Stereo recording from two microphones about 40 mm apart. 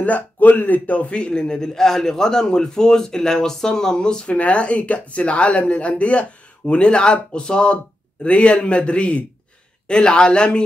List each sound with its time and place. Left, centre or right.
0.0 s a man's voice: left